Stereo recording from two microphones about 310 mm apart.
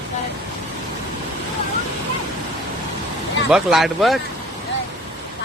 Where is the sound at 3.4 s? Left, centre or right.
Centre.